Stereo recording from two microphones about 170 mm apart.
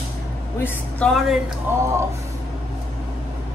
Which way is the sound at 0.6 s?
5° left (ahead or behind).